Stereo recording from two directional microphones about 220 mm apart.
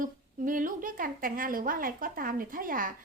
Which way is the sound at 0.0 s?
40° right (ahead or behind).